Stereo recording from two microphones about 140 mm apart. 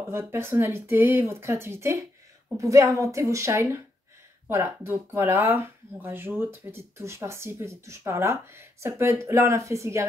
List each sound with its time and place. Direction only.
0.0 s speech: 20° right (ahead or behind)